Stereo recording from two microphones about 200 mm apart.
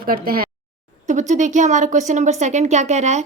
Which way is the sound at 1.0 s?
35° right (ahead or behind).